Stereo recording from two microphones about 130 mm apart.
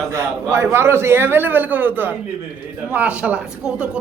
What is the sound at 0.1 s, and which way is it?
A man's voice, 20° right (ahead or behind).